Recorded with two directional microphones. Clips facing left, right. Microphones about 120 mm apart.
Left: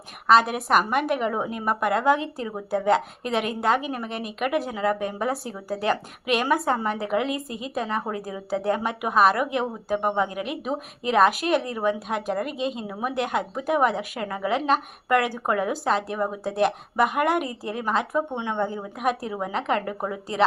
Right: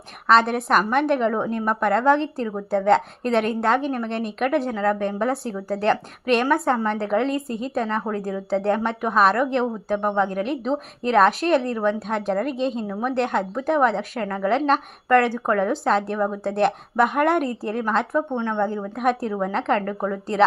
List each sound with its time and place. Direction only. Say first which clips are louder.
0.3 s a woman's voice: right 1 dB; 5° left (ahead or behind)